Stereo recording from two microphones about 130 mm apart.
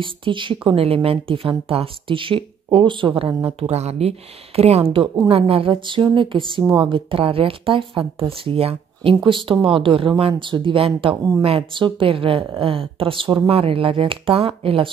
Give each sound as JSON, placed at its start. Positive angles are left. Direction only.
{"t": 0.0, "sound": "speech", "side_deg": -40}
{"t": 3.4, "sound": "speech", "side_deg": -50}